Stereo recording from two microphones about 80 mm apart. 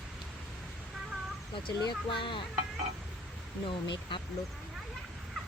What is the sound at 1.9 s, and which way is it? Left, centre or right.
Speech, left.